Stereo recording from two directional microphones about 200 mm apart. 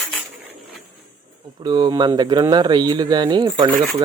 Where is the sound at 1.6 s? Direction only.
20° right (ahead or behind).